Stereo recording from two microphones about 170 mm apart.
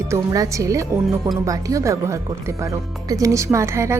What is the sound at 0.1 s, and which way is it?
A woman's voice, 15° right (ahead or behind).